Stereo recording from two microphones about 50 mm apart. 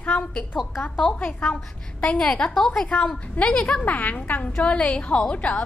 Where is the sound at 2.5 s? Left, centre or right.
Centre.